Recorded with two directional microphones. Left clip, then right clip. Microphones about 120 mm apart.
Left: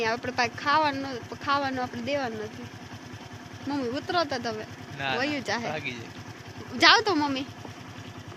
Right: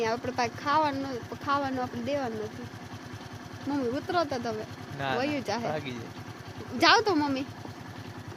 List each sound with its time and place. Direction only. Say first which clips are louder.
0.0 s speech: left 2 dB; 5° left (ahead or behind)
3.7 s speech: left 1 dB; 5° left (ahead or behind)
5.7 s speech: left 2 dB; 45° right (ahead or behind)
6.7 s speech: left 2 dB; centre (ahead or behind)